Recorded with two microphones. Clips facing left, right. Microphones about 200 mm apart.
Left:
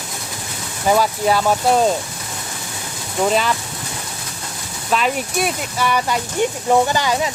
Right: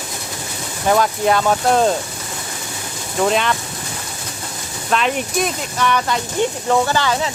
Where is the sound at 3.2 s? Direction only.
5° left (ahead or behind).